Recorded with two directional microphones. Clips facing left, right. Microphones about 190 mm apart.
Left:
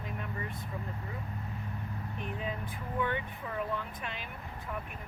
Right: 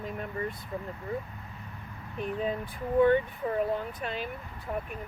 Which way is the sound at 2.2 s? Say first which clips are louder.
Right 8 dB; 35° right (ahead or behind).